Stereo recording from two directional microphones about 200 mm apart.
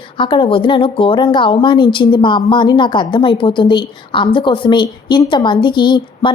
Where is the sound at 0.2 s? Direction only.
25° left (ahead or behind).